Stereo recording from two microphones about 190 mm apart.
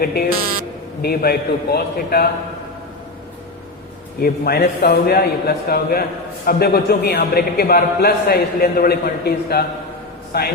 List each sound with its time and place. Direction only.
0.0 s a man's voice: 55° left (ahead or behind)
4.2 s a man's voice: 55° left (ahead or behind)